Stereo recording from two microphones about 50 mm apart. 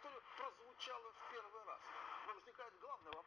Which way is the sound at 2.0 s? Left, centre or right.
Centre.